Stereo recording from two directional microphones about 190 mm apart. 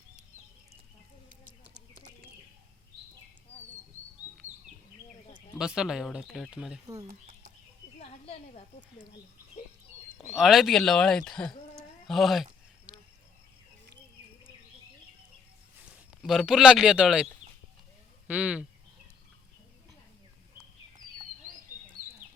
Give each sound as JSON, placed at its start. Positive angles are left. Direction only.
{"t": 1.9, "sound": "bird", "side_deg": -40}
{"t": 5.5, "sound": "speech", "side_deg": -5}
{"t": 10.3, "sound": "speech", "side_deg": 0}
{"t": 16.2, "sound": "speech", "side_deg": 0}
{"t": 18.3, "sound": "speech", "side_deg": -5}